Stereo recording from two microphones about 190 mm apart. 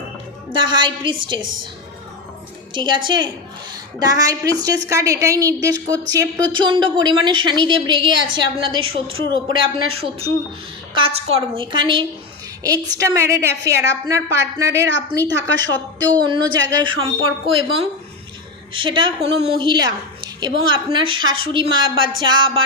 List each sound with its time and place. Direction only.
0.5 s a woman's voice: 25° right (ahead or behind)
2.7 s a woman's voice: 25° right (ahead or behind)
21.2 s speech: 90° right
21.5 s a woman's voice: 25° right (ahead or behind)